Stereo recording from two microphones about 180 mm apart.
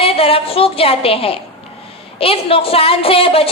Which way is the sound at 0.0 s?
30° left (ahead or behind).